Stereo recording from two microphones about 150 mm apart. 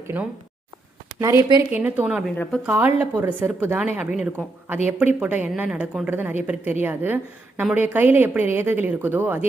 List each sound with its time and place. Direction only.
1.2 s speech: 20° right (ahead or behind)
1.7 s a woman's voice: 10° right (ahead or behind)
2.2 s speech: 5° left (ahead or behind)
2.6 s a woman's voice: 10° right (ahead or behind)